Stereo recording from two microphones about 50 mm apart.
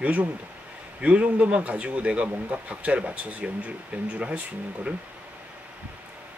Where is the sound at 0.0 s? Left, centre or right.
Right.